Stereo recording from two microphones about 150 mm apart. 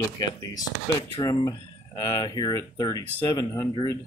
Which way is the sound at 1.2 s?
30° left (ahead or behind).